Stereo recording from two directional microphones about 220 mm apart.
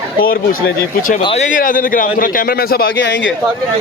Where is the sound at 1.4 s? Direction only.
40° left (ahead or behind); by 3.3 s 55° left (ahead or behind).